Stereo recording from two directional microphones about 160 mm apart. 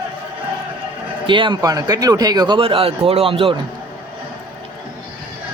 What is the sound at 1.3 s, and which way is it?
Speech, 30° right (ahead or behind).